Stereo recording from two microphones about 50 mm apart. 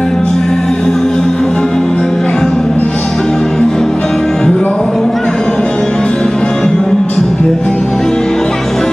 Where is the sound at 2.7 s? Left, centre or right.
Left.